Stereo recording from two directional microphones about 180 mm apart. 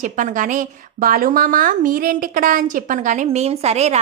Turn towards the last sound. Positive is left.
turn(degrees=-35)  # may be behind; listen again after turning